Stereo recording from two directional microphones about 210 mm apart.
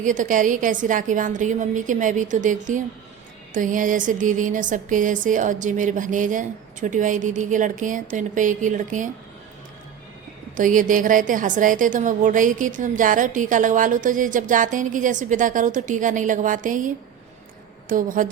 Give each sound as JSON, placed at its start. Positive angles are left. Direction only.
{"t": 0.0, "sound": "a woman's voice", "side_deg": -35}
{"t": 10.6, "sound": "a woman's voice", "side_deg": -40}